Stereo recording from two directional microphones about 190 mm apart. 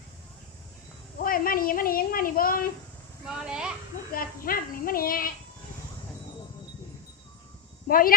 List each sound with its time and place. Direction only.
1.2 s a sound: 50° left (ahead or behind)
3.2 s speech: 5° right (ahead or behind)
4.1 s a child's voice: 50° left (ahead or behind)
7.9 s a child's voice: 50° left (ahead or behind)